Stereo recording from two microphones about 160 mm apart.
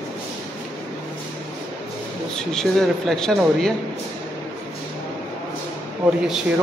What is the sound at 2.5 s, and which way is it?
Speech, 5° left (ahead or behind).